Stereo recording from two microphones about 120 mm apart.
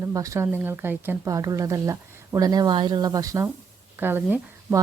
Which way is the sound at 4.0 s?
15° right (ahead or behind).